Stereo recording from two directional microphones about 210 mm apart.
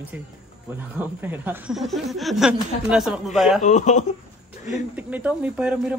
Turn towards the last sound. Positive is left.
turn(degrees=-5)  # may be behind; listen again after turning